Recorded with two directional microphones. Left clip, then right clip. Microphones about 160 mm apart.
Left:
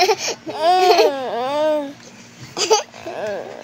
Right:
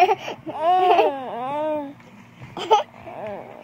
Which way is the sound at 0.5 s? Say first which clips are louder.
Left 3 dB; 5° left (ahead or behind).